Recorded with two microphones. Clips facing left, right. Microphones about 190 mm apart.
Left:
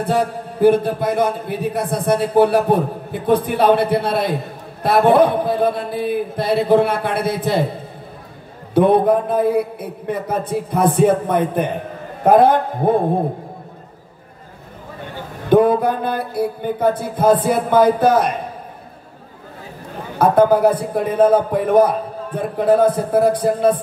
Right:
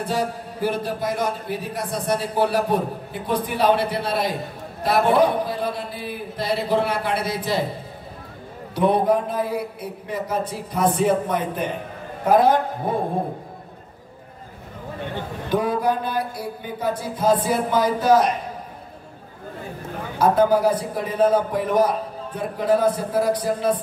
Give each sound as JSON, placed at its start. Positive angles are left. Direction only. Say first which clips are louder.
{"t": 0.0, "sound": "a man's voice", "louder": "left 5 dB", "side_deg": 55}
{"t": 8.7, "sound": "a man's voice", "louder": "left 5 dB", "side_deg": 55}
{"t": 15.5, "sound": "a man's voice", "louder": "left 8 dB", "side_deg": 55}
{"t": 20.2, "sound": "a man's voice", "louder": "left 4 dB", "side_deg": 55}